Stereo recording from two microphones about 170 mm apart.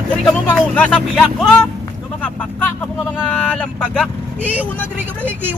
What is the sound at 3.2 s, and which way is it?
Speech, 5° left (ahead or behind).